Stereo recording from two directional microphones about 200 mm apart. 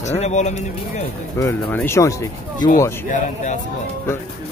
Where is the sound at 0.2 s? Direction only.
35° left (ahead or behind).